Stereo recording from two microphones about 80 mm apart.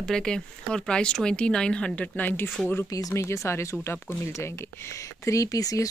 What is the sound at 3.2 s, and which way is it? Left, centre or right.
Speech, left.